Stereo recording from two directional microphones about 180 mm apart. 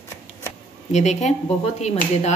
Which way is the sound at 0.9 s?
40° left (ahead or behind).